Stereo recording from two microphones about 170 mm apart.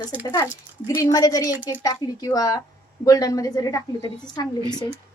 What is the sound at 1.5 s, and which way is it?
Speech, 10° right (ahead or behind).